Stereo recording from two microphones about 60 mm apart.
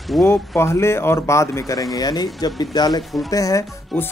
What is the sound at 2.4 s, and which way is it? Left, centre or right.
Speech, left.